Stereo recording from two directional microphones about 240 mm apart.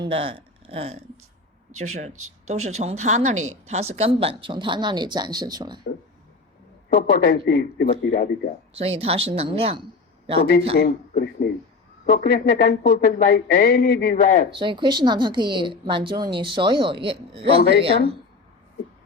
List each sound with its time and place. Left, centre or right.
0.0 s speech: right
2.5 s speech: right
6.9 s speech: left
7.9 s speech: left
8.8 s speech: right
10.8 s speech: left
14.6 s speech: centre
17.6 s a woman's voice: left